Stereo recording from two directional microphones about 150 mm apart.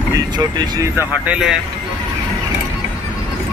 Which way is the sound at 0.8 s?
15° right (ahead or behind).